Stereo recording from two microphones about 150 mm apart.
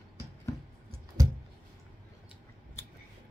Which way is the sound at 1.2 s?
25° right (ahead or behind).